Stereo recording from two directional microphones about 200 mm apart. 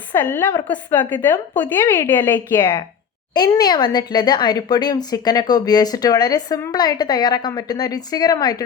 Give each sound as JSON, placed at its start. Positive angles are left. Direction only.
{"t": 0.1, "sound": "a woman's voice", "side_deg": 10}